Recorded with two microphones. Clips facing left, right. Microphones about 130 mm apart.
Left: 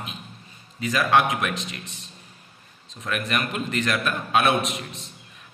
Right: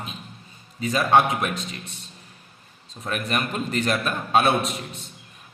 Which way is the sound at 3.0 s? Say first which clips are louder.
Even; 35° right (ahead or behind).